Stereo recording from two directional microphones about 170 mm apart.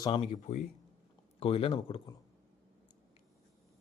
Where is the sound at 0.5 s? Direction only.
45° left (ahead or behind).